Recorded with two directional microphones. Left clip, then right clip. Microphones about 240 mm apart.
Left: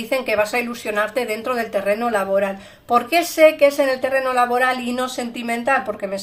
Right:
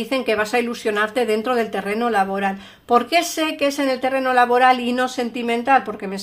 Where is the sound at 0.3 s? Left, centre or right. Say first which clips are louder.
Right 1 dB; right.